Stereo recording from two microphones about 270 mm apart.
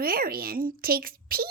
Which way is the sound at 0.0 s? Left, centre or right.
Right.